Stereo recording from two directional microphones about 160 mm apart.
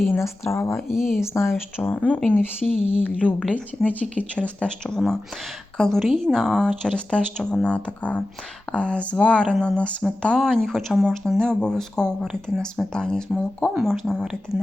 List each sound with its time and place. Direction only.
0.2 s speech: 15° left (ahead or behind)
0.9 s speech: centre (ahead or behind)
1.2 s speech: 15° left (ahead or behind)
2.6 s speech: centre (ahead or behind)
3.0 s speech: 10° left (ahead or behind)